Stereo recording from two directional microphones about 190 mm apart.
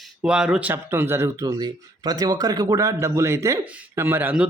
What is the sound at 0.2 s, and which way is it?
Speech, 5° right (ahead or behind).